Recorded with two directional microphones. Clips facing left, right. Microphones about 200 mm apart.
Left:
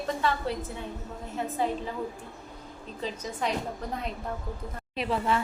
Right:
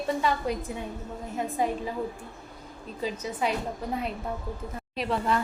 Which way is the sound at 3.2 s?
5° right (ahead or behind).